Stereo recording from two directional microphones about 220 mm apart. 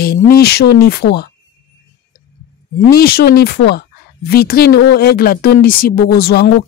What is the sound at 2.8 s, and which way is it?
A woman's voice, 45° left (ahead or behind).